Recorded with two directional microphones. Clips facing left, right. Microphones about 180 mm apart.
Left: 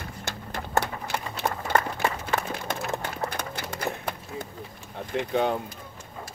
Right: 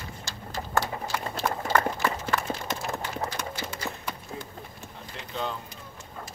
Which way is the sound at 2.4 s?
60° left (ahead or behind).